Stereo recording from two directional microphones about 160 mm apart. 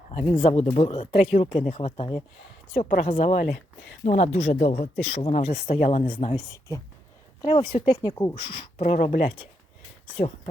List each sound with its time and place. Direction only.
0.1 s speech: 45° left (ahead or behind)
4.8 s speech: 40° left (ahead or behind)
6.3 s speech: 20° left (ahead or behind)
7.4 s speech: 35° left (ahead or behind)
8.1 s speech: 20° left (ahead or behind)
8.4 s speech: 30° left (ahead or behind)
8.8 s speech: 55° left (ahead or behind)
10.2 s speech: 40° left (ahead or behind)